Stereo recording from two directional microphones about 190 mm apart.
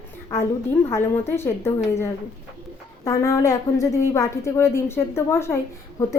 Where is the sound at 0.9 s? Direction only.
10° left (ahead or behind).